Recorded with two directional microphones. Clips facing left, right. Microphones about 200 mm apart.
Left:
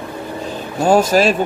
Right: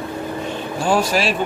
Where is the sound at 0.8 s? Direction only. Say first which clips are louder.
Left 6 dB; 40° left (ahead or behind).